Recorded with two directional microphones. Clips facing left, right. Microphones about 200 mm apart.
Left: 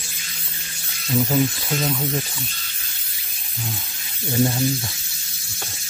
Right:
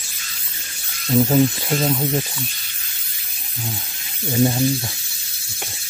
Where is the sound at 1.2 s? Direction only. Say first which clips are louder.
Right 4 dB; 25° right (ahead or behind).